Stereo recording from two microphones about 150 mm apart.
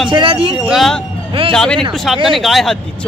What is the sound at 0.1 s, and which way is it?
Speech, 35° right (ahead or behind).